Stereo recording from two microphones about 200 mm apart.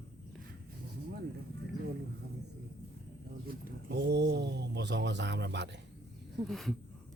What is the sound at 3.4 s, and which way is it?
Speech, 60° right (ahead or behind).